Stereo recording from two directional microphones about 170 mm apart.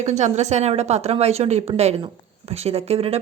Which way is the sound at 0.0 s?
45° right (ahead or behind).